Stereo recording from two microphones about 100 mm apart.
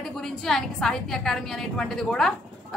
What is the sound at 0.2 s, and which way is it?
A woman's voice, 5° left (ahead or behind).